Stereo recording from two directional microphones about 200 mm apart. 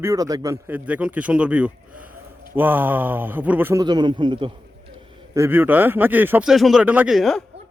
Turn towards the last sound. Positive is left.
turn(degrees=0)  # may be behind; listen again after turning